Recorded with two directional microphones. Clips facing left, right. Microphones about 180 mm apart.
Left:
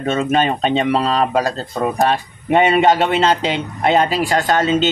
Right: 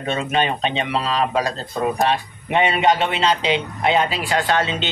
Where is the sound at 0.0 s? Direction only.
45° left (ahead or behind).